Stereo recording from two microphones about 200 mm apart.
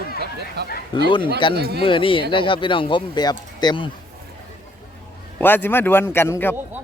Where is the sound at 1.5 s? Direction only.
55° right (ahead or behind).